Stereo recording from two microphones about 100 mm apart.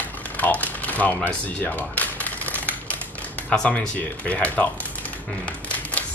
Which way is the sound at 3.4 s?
15° left (ahead or behind).